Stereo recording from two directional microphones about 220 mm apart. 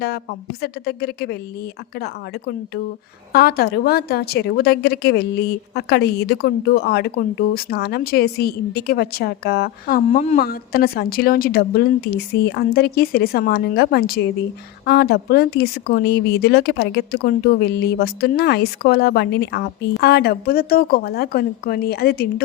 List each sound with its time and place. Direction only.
0.6 s a woman's voice: 45° left (ahead or behind)